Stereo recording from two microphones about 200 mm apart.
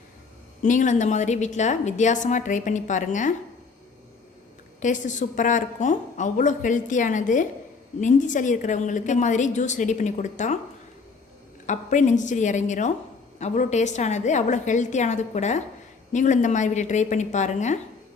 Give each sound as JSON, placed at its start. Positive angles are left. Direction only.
{"t": 0.6, "sound": "a woman's voice", "side_deg": 40}
{"t": 4.8, "sound": "a woman's voice", "side_deg": 40}
{"t": 11.6, "sound": "a woman's voice", "side_deg": 40}